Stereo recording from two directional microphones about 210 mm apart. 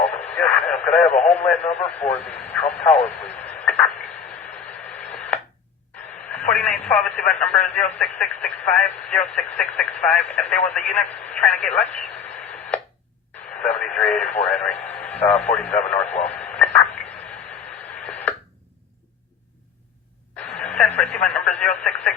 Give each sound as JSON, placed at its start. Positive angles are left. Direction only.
{"t": 0.0, "sound": "radio", "side_deg": 5}
{"t": 1.3, "sound": "speech", "side_deg": 5}
{"t": 4.9, "sound": "radio", "side_deg": 5}
{"t": 6.3, "sound": "speech", "side_deg": 5}
{"t": 13.6, "sound": "speech", "side_deg": 5}
{"t": 18.0, "sound": "radio", "side_deg": 5}
{"t": 20.3, "sound": "radio", "side_deg": 5}
{"t": 21.8, "sound": "speech", "side_deg": 5}